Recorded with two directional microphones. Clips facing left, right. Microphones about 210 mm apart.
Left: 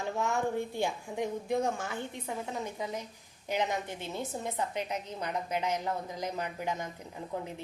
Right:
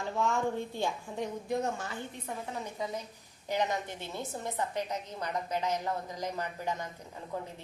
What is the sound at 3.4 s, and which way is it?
A woman's voice, 20° left (ahead or behind).